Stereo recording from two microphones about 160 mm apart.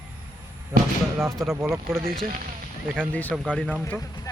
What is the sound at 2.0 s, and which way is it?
Speech, 60° right (ahead or behind).